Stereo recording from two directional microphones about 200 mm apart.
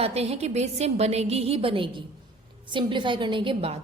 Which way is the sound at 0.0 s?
30° right (ahead or behind).